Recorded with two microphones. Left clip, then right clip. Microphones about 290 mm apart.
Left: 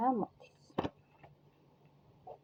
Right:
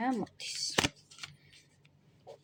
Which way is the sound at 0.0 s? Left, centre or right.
Right.